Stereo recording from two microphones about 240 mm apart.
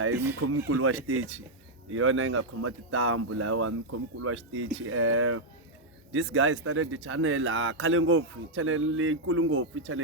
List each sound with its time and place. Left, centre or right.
0.1 s speech: centre
0.3 s speech: right